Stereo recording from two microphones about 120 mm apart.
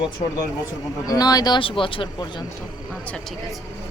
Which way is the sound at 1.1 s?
30° left (ahead or behind).